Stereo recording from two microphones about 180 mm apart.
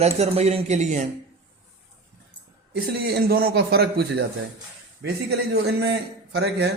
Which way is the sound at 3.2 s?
55° right (ahead or behind).